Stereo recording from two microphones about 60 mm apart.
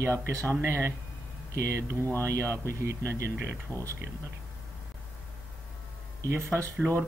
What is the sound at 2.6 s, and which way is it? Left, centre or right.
Speech, right.